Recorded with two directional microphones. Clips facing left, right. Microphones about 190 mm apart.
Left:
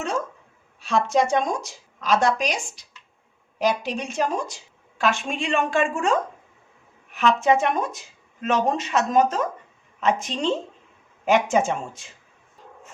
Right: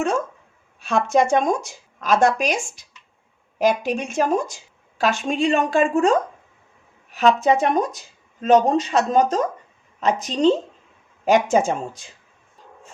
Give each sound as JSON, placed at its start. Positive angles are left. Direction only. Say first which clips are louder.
{"t": 0.8, "sound": "a woman's voice", "louder": "right 2 dB", "side_deg": -50}